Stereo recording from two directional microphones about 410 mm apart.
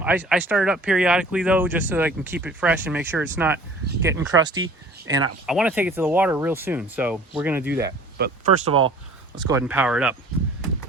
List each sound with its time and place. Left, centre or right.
0.0 s speech: centre
8.2 s speech: right
9.5 s speech: centre